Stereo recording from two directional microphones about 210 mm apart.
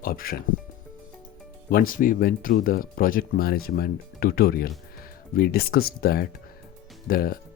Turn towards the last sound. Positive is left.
turn(degrees=45)  # may be behind; listen again after turning